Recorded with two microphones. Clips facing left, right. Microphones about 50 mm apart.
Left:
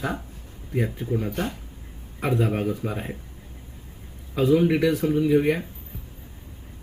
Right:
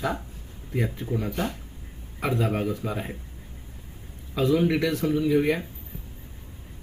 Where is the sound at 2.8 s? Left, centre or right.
Centre.